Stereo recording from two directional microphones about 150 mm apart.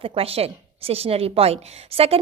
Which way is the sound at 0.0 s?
40° right (ahead or behind).